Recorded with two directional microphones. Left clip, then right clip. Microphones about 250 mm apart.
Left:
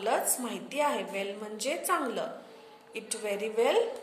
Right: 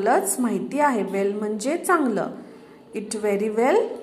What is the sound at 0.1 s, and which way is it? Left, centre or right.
A woman's voice, centre.